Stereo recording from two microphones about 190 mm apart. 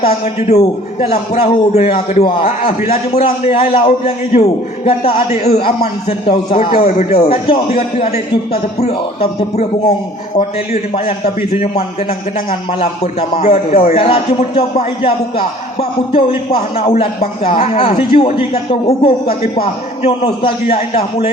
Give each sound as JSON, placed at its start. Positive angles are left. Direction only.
{"t": 0.0, "sound": "a man's voice", "side_deg": 35}
{"t": 10.7, "sound": "a man's voice", "side_deg": 30}